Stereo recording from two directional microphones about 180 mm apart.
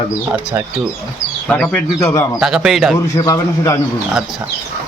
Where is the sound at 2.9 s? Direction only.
20° left (ahead or behind).